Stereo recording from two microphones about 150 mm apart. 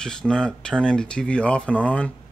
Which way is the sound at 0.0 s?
5° left (ahead or behind).